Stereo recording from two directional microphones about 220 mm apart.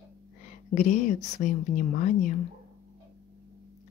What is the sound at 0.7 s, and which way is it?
Speech, 35° left (ahead or behind).